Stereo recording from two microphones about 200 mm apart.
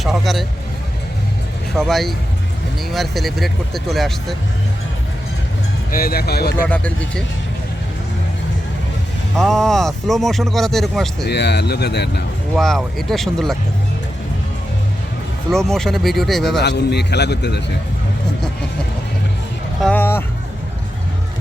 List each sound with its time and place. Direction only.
0.0 s vehicle: centre (ahead or behind)
1.7 s speech: centre (ahead or behind)
5.9 s speech: 50° left (ahead or behind)
6.7 s speech: 5° left (ahead or behind)
9.4 s speech: centre (ahead or behind)
11.3 s a man's voice: 55° left (ahead or behind)
12.5 s speech: centre (ahead or behind)
15.4 s speech: centre (ahead or behind)
16.6 s a man's voice: 55° left (ahead or behind)
19.8 s vehicle: 10° left (ahead or behind)